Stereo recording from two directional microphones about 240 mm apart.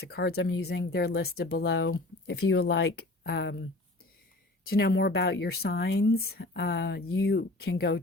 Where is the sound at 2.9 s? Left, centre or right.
Left.